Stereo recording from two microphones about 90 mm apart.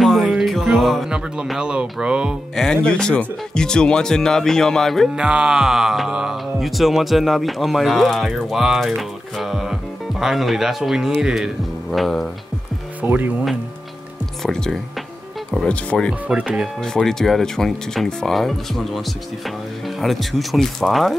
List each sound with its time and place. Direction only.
0.0 s music: centre (ahead or behind)
0.5 s speech: centre (ahead or behind)
2.5 s speech: 5° left (ahead or behind)
5.1 s music: 10° right (ahead or behind)
13.0 s speech: 20° right (ahead or behind)
14.4 s music: 5° left (ahead or behind)
15.7 s speech: 15° left (ahead or behind)
16.3 s speech: 10° right (ahead or behind)
16.8 s music: 5° left (ahead or behind)